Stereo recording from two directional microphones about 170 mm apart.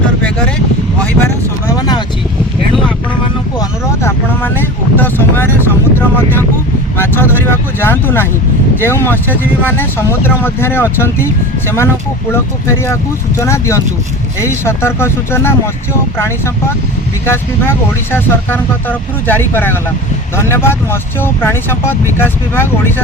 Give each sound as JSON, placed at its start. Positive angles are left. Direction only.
{"t": 1.2, "sound": "vehicle", "side_deg": 20}
{"t": 3.6, "sound": "vehicle", "side_deg": 15}
{"t": 6.9, "sound": "vehicle", "side_deg": 15}
{"t": 8.8, "sound": "speech", "side_deg": 15}
{"t": 12.3, "sound": "speech", "side_deg": 15}